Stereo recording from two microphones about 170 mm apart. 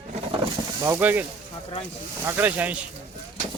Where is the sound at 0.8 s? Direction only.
15° right (ahead or behind).